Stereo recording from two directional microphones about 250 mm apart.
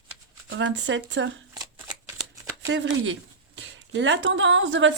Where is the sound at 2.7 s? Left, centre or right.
Right.